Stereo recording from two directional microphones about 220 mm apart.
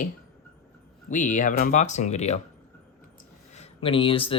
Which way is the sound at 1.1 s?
35° left (ahead or behind).